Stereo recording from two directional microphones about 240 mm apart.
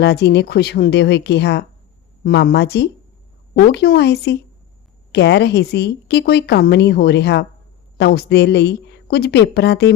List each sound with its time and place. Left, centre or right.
0.0 s a woman's voice: left